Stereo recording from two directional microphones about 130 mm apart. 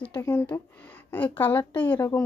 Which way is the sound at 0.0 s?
15° left (ahead or behind).